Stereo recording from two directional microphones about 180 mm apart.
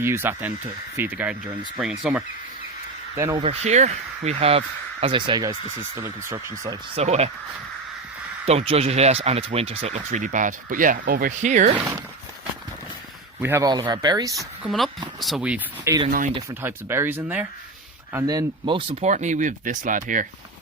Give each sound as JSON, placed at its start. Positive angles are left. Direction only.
{"t": 0.0, "sound": "speech", "side_deg": -15}
{"t": 3.2, "sound": "speech", "side_deg": -15}
{"t": 3.4, "sound": "speech", "side_deg": -35}
{"t": 6.9, "sound": "speech", "side_deg": -35}
{"t": 8.4, "sound": "speech", "side_deg": -35}
{"t": 13.4, "sound": "speech", "side_deg": -15}
{"t": 15.2, "sound": "speech", "side_deg": -5}
{"t": 19.0, "sound": "speech", "side_deg": -40}